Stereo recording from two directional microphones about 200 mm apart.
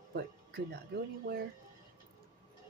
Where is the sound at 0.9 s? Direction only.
50° right (ahead or behind).